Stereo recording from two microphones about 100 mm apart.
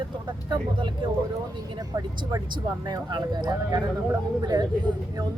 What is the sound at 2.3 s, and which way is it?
Speech, 45° right (ahead or behind).